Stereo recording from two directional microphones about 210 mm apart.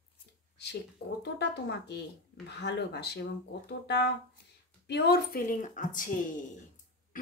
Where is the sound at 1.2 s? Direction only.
55° left (ahead or behind).